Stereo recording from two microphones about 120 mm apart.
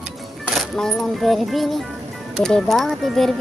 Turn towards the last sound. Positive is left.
turn(degrees=0)  # may be behind; listen again after turning